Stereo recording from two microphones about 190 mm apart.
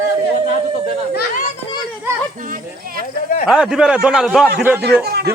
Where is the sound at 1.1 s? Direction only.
45° left (ahead or behind).